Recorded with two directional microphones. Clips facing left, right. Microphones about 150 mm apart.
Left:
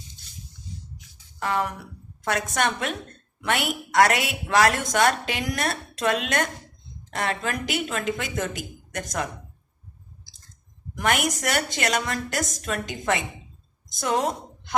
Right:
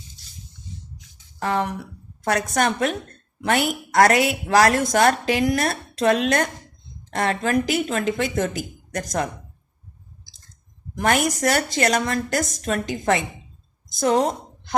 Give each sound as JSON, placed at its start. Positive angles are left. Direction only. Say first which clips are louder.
{"t": 1.4, "sound": "a woman's voice", "louder": "right 3 dB", "side_deg": -35}
{"t": 10.9, "sound": "a woman's voice", "louder": "right 4 dB", "side_deg": -35}